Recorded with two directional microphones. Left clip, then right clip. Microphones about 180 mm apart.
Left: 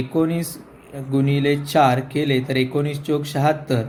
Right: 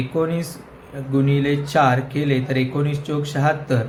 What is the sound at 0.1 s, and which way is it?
Speech, 35° left (ahead or behind).